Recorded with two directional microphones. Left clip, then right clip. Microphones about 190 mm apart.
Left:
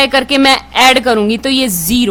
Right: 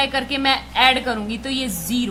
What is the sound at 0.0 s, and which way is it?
A woman's voice, 55° left (ahead or behind).